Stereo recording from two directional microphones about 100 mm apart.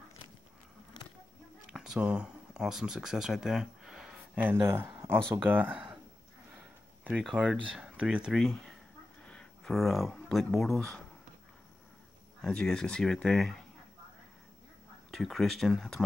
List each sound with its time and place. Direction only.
1.7 s speech: 5° right (ahead or behind)
4.4 s speech: 20° right (ahead or behind)
7.2 s speech: 5° right (ahead or behind)
8.3 s speech: centre (ahead or behind)
12.4 s speech: 5° left (ahead or behind)
15.0 s speech: centre (ahead or behind)